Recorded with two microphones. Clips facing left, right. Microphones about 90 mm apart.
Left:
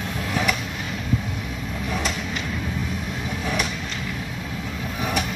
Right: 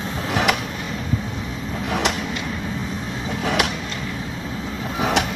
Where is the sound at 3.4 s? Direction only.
80° right.